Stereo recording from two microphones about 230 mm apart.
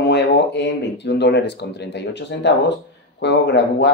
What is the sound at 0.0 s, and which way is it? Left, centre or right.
Speech, left.